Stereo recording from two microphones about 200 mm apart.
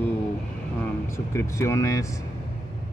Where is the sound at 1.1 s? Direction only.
15° left (ahead or behind).